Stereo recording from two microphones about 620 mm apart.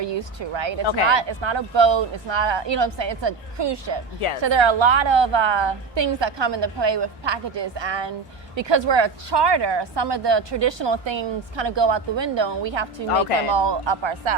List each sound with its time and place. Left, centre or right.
0.0 s speech: right